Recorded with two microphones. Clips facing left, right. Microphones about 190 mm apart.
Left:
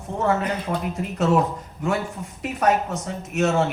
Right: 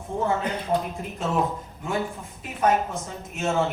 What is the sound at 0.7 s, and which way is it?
Speech, 90° left.